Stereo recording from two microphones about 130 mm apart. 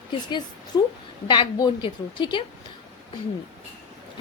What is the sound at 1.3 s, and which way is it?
A woman's voice, 35° left (ahead or behind).